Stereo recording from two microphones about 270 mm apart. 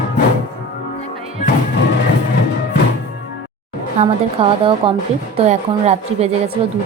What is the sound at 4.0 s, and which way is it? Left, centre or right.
A woman's voice, right.